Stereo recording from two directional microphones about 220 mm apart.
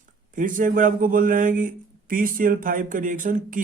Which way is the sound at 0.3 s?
35° right (ahead or behind).